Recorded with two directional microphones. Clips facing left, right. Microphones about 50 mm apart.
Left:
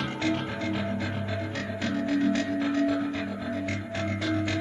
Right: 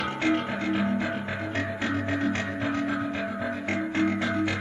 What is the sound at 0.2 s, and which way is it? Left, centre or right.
Music, right.